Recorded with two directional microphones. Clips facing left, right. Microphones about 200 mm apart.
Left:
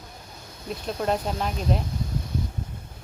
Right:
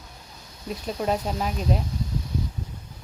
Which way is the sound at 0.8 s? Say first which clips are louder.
Even; 5° right (ahead or behind).